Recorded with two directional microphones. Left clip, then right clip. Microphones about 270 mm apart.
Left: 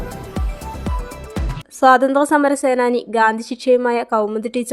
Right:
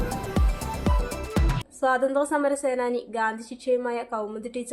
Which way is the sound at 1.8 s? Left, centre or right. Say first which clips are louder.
Left 11 dB; left.